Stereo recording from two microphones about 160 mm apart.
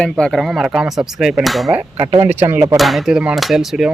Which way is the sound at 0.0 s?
5° left (ahead or behind).